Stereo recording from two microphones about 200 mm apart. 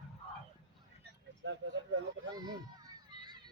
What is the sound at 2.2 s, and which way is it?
Children playing, 20° right (ahead or behind).